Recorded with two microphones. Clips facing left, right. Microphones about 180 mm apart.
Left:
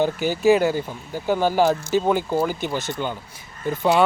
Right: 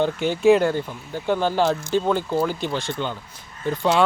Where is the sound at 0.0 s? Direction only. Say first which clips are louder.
Right 1 dB; 5° left (ahead or behind).